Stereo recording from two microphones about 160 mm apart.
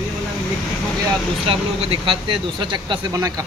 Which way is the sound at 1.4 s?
35° right (ahead or behind).